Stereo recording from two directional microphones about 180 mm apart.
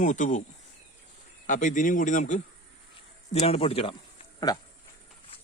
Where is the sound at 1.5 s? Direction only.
45° left (ahead or behind); by 4.6 s 25° left (ahead or behind).